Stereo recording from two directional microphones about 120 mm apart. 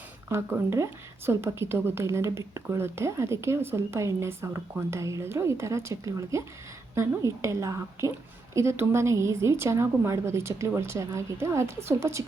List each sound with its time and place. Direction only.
0.3 s speech: 20° right (ahead or behind)